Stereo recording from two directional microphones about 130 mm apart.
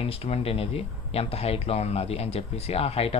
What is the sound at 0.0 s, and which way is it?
Speech, 50° left (ahead or behind).